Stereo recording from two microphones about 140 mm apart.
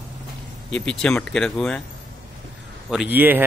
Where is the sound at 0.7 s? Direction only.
5° left (ahead or behind).